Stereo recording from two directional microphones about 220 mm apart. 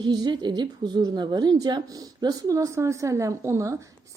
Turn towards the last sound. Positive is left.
turn(degrees=-15)  # may be behind; listen again after turning